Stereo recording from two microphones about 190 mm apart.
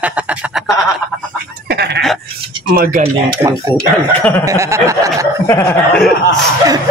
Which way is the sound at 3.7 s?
10° left (ahead or behind).